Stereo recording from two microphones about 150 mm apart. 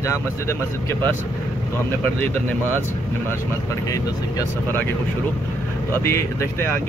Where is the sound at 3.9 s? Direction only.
20° left (ahead or behind).